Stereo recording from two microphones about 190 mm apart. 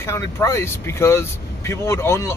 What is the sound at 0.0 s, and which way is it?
Speech, 15° left (ahead or behind).